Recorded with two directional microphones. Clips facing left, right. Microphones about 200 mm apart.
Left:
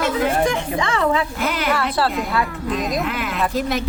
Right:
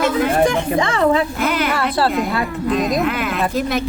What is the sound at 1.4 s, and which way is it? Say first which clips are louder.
Speech: right 2 dB; 55° right (ahead or behind).